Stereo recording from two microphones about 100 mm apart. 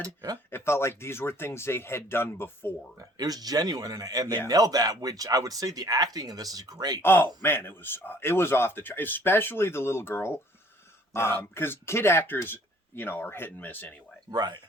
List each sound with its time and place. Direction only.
0.0 s speech: 40° right (ahead or behind)
0.5 s a man's voice: 25° left (ahead or behind)
3.0 s speech: 40° right (ahead or behind)
7.0 s a man's voice: 20° left (ahead or behind)
14.3 s speech: 40° right (ahead or behind)